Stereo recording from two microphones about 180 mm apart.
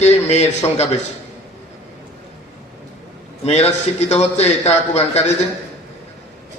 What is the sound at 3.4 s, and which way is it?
A man's voice, 35° left (ahead or behind).